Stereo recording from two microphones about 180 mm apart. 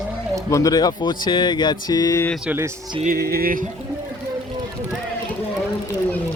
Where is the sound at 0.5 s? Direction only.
20° left (ahead or behind).